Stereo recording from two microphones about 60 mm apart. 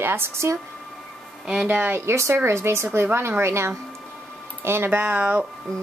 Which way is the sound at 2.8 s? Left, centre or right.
Right.